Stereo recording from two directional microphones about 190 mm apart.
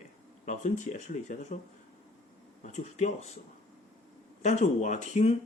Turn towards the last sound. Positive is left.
turn(degrees=40)  # may be behind; listen again after turning